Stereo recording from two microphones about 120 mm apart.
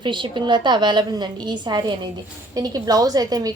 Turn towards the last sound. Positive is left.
turn(degrees=-30)  # may be behind; listen again after turning